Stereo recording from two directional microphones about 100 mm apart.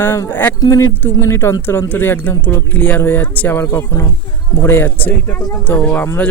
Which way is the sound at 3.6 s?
25° left (ahead or behind).